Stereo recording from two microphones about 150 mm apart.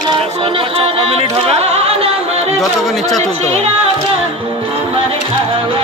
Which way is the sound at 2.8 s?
Centre (ahead or behind).